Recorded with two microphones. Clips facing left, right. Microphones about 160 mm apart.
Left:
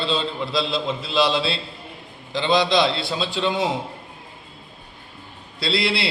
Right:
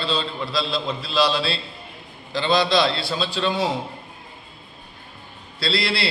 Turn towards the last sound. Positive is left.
turn(degrees=20)  # may be behind; listen again after turning